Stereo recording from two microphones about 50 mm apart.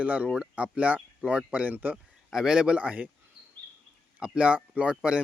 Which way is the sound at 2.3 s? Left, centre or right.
Centre.